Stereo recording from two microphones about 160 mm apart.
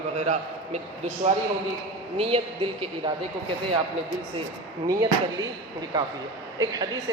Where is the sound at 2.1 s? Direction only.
40° right (ahead or behind).